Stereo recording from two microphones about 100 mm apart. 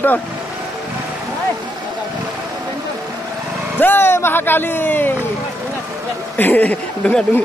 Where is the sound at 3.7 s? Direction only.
20° left (ahead or behind).